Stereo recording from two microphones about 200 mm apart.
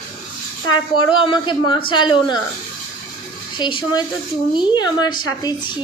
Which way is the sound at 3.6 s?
25° left (ahead or behind).